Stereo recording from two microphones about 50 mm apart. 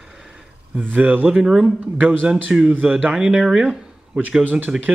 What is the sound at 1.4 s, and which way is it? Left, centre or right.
Speech, centre.